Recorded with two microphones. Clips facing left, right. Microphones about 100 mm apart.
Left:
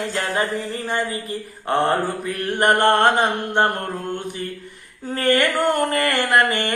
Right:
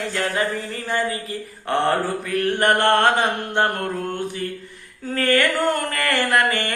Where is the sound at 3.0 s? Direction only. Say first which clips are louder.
Left 1 dB; 40° left (ahead or behind).